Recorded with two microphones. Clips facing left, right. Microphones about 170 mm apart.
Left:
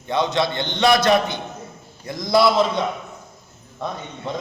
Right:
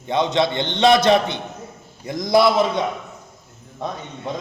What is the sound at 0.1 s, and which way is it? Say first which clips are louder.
A man's voice: right 2 dB; 20° right (ahead or behind).